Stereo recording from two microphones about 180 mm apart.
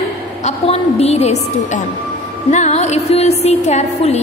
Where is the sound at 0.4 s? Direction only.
35° left (ahead or behind).